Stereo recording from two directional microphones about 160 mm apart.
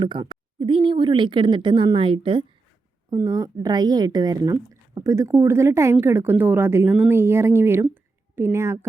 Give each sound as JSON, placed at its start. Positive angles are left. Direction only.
{"t": 0.0, "sound": "a woman's voice", "side_deg": -30}
{"t": 3.1, "sound": "speech", "side_deg": -20}